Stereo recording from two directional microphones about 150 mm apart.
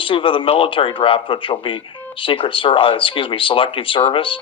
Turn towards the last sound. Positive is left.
turn(degrees=35)  # may be behind; listen again after turning